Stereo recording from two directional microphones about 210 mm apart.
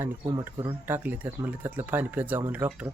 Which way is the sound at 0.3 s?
15° right (ahead or behind).